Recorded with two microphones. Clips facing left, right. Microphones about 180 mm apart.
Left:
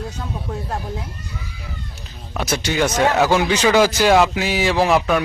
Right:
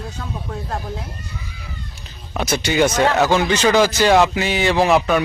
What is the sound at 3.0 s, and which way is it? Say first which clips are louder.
A man's voice: even; 10° left (ahead or behind).